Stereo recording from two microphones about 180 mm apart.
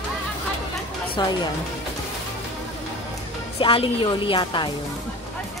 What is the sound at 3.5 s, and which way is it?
Speech, 30° left (ahead or behind).